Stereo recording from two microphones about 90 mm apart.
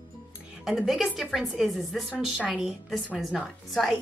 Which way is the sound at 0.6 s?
5° right (ahead or behind).